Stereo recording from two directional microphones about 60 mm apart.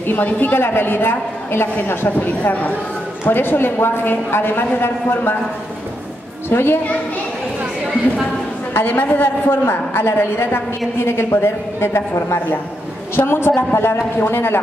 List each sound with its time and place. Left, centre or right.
0.0 s a woman's voice: left
6.5 s a woman's voice: left
8.7 s a woman's voice: left